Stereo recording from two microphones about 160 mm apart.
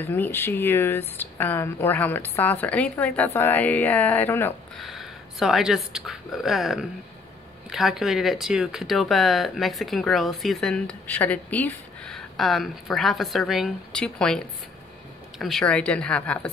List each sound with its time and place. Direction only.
0.0 s speech: 15° left (ahead or behind)
4.7 s speech: centre (ahead or behind)